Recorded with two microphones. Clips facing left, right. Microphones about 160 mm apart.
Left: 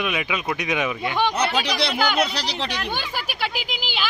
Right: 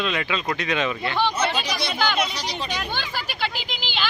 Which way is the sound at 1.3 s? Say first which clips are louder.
Left 2 dB; 65° left (ahead or behind).